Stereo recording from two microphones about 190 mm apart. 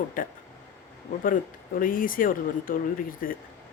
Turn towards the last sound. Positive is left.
turn(degrees=50)  # may be behind; listen again after turning